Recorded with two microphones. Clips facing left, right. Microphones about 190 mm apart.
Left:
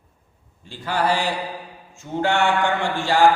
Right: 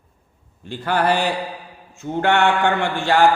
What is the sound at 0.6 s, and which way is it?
Mantra, 60° right (ahead or behind).